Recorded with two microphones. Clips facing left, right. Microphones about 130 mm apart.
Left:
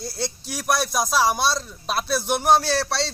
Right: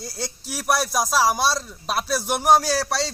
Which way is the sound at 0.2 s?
5° right (ahead or behind).